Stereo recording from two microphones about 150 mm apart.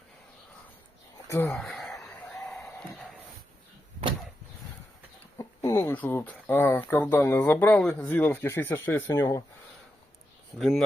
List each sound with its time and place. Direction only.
1.3 s speech: 15° left (ahead or behind)
1.5 s a sound: 5° left (ahead or behind)
5.4 s speech: 20° left (ahead or behind)
10.6 s speech: centre (ahead or behind)